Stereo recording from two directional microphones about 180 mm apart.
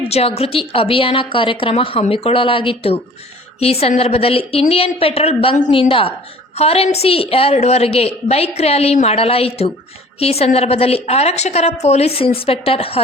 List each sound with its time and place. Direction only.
0.1 s a woman's voice: 35° left (ahead or behind)